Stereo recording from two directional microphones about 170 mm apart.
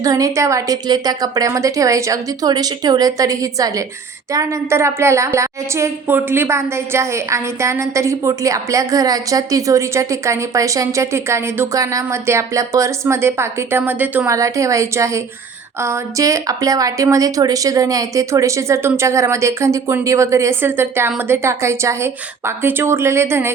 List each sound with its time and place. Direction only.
0.0 s a woman's voice: 20° right (ahead or behind)